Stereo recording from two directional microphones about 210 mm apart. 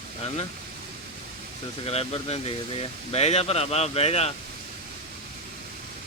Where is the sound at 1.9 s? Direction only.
30° left (ahead or behind).